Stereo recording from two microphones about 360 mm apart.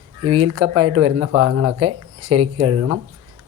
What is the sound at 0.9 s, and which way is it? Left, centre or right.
Speech, right.